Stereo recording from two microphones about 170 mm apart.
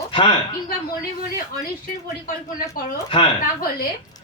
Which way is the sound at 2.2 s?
55° left (ahead or behind).